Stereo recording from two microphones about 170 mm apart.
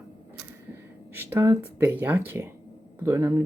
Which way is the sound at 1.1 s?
15° right (ahead or behind).